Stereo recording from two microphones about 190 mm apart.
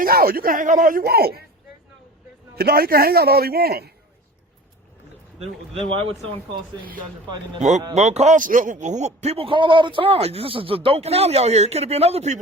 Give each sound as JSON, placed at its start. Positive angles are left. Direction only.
{"t": 0.0, "sound": "speech", "side_deg": -50}
{"t": 2.6, "sound": "speech", "side_deg": -55}
{"t": 5.9, "sound": "a man's voice", "side_deg": -30}
{"t": 7.6, "sound": "a man's voice", "side_deg": -40}